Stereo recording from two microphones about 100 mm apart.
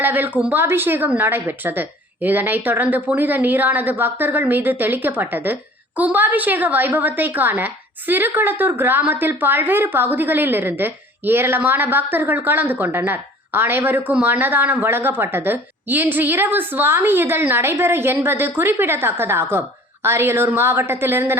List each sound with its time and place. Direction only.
0.0 s a woman's voice: 20° right (ahead or behind)